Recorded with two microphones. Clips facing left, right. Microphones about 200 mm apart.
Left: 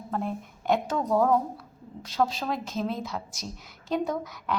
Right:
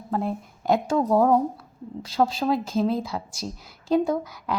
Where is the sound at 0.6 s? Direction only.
35° right (ahead or behind).